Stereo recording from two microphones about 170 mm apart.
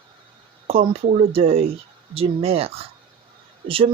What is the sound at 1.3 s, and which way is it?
Speech, 35° right (ahead or behind).